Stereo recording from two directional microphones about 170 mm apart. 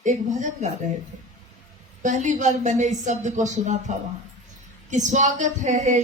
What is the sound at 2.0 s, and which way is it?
Speech, 45° right (ahead or behind).